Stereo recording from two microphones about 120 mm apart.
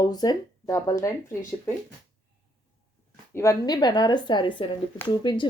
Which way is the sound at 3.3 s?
25° left (ahead or behind).